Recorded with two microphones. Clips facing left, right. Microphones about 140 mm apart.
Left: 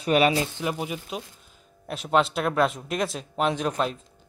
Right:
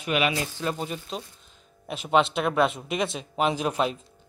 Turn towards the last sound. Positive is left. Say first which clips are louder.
# even
turn(degrees=-5)  # may be behind; listen again after turning